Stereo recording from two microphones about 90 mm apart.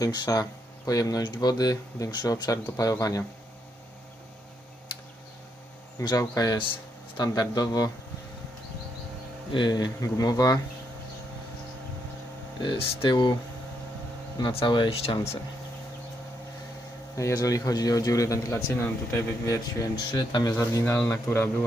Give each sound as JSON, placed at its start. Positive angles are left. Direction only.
{"t": 0.0, "sound": "a man's voice", "side_deg": 40}
{"t": 1.2, "sound": "a man's voice", "side_deg": 50}
{"t": 6.0, "sound": "a man's voice", "side_deg": 40}
{"t": 9.5, "sound": "speech", "side_deg": 55}
{"t": 12.6, "sound": "speech", "side_deg": 60}
{"t": 14.5, "sound": "speech", "side_deg": 60}
{"t": 17.2, "sound": "a man's voice", "side_deg": 35}
{"t": 19.8, "sound": "a man's voice", "side_deg": 50}
{"t": 21.3, "sound": "a man's voice", "side_deg": 25}